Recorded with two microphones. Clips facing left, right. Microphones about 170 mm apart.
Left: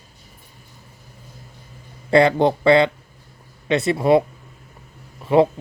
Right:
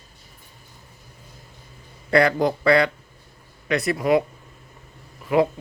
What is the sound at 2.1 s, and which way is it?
Speech, 25° left (ahead or behind).